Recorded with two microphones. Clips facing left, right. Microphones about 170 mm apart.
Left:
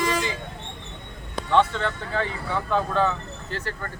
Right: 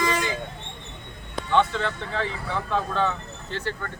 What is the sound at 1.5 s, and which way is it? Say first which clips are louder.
Speech: left 1 dB; centre (ahead or behind).